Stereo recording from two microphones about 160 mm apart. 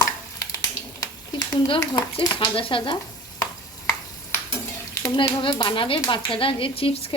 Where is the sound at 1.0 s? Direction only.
25° left (ahead or behind).